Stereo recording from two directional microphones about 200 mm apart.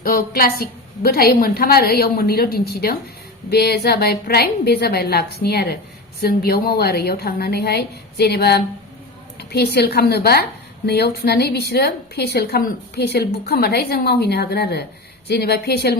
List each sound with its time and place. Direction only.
0.0 s a woman's voice: 50° left (ahead or behind)